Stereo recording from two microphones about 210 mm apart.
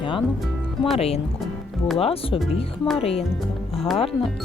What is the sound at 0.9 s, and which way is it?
Speech, 30° left (ahead or behind).